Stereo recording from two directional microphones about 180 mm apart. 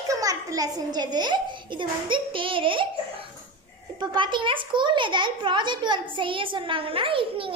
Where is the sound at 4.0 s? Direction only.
25° right (ahead or behind).